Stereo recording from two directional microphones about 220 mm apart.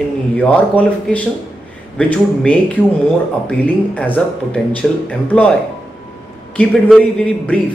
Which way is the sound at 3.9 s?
5° left (ahead or behind).